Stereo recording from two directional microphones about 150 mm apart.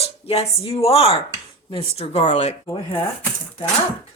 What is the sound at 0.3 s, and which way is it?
Speech, 40° left (ahead or behind).